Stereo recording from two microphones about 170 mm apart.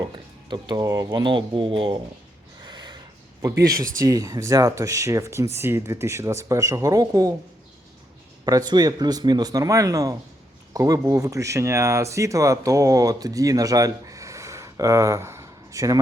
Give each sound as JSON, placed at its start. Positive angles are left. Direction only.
{"t": 0.5, "sound": "speech", "side_deg": -25}
{"t": 2.6, "sound": "a sound", "side_deg": -25}
{"t": 3.4, "sound": "speech", "side_deg": -20}
{"t": 8.4, "sound": "speech", "side_deg": -20}